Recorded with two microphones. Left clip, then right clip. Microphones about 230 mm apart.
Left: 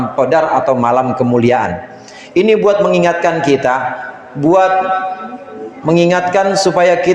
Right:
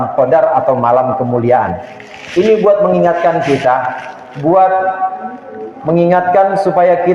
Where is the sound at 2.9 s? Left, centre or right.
Left.